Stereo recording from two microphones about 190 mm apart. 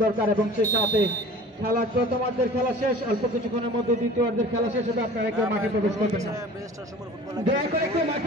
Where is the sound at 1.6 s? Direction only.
50° right (ahead or behind).